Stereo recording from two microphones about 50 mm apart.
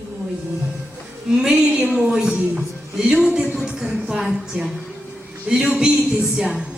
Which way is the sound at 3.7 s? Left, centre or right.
Centre.